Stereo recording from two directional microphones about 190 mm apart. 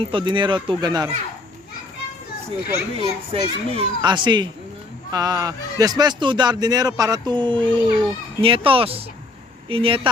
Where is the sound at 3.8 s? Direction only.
25° right (ahead or behind).